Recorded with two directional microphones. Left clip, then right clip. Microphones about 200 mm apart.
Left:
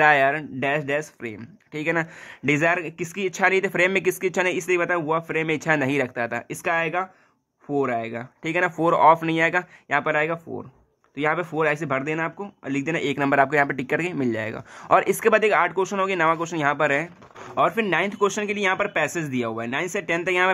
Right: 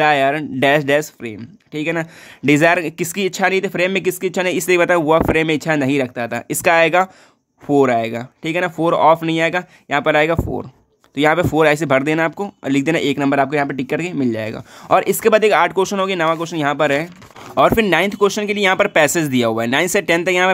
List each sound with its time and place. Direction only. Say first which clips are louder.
0.0 s speech: right 3 dB; 30° right (ahead or behind)
1.2 s speech: right 5 dB; 25° right (ahead or behind)
2.4 s speech: right 8 dB; 35° right (ahead or behind)
6.6 s speech: right 11 dB; 45° right (ahead or behind)
8.5 s speech: right 4 dB; 25° right (ahead or behind)